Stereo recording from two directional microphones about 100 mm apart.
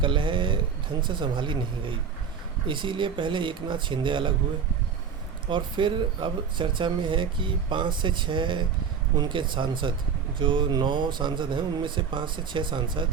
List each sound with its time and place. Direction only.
0.0 s speech: 55° right (ahead or behind)
5.5 s speech: 55° right (ahead or behind)